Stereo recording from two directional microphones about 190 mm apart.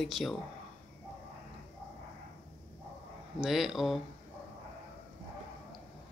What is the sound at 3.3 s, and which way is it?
Speech, centre (ahead or behind).